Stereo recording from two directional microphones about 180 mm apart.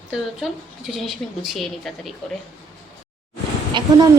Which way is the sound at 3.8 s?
25° right (ahead or behind).